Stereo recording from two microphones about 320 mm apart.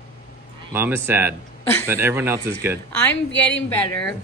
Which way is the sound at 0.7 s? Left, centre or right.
Centre.